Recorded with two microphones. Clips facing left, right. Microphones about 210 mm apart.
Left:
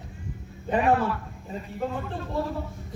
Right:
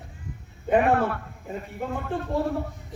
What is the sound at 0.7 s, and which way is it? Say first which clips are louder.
Speech: right 2 dB; 55° right (ahead or behind).